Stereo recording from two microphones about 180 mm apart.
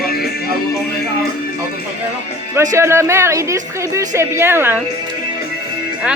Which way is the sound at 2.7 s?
15° right (ahead or behind).